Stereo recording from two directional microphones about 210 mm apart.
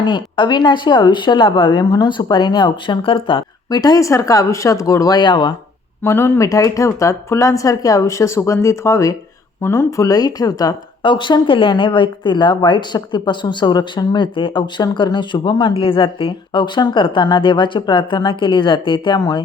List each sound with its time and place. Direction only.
0.0 s speech: 20° left (ahead or behind)